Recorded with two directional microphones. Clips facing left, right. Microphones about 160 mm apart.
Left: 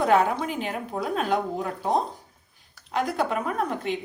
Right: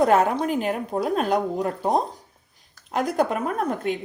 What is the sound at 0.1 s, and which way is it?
A woman's voice, 45° right (ahead or behind).